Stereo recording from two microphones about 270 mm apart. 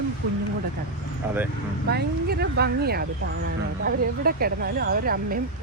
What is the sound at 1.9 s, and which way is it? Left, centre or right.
Speech, right.